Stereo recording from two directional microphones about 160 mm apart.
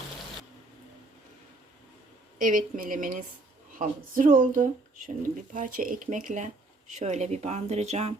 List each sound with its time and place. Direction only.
2.4 s speech: 55° right (ahead or behind)